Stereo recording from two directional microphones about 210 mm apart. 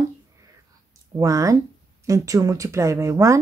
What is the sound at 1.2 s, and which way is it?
Speech, 15° right (ahead or behind).